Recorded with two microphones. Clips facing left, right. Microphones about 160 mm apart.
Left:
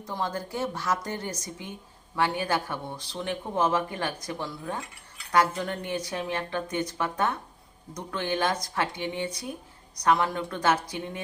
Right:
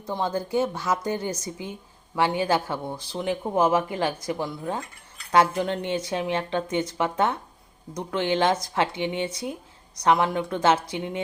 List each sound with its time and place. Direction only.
0.0 s speech: 25° right (ahead or behind)